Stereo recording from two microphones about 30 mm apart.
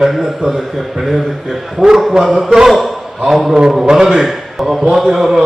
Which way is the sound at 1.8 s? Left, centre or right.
Centre.